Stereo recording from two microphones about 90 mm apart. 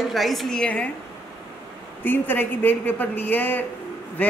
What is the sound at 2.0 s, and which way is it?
A man's voice, 20° left (ahead or behind).